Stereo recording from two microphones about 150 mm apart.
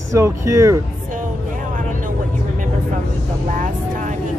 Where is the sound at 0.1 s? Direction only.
20° right (ahead or behind).